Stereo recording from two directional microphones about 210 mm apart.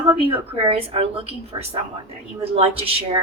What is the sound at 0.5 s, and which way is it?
A man's voice, 30° right (ahead or behind).